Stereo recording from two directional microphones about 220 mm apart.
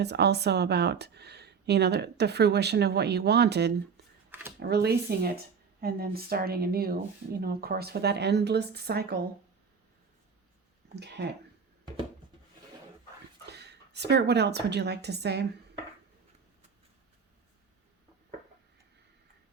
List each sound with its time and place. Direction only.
0.0 s speech: 50° right (ahead or behind)
11.0 s speech: 50° right (ahead or behind)
13.5 s a woman's voice: 50° right (ahead or behind)